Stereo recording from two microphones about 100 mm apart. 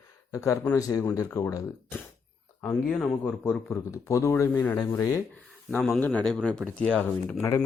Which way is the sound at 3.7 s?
30° left (ahead or behind).